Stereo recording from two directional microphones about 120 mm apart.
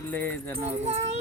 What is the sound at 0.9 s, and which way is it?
Speech, 60° right (ahead or behind).